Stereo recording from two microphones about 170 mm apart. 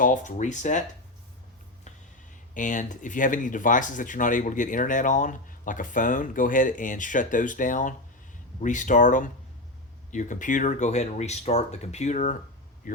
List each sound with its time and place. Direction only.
0.0 s speech: 50° left (ahead or behind)
2.6 s speech: 50° left (ahead or behind)